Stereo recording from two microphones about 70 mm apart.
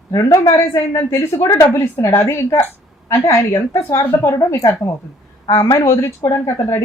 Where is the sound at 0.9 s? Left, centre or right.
Left.